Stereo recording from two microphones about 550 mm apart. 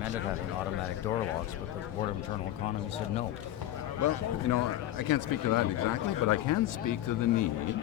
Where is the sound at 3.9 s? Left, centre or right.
Left.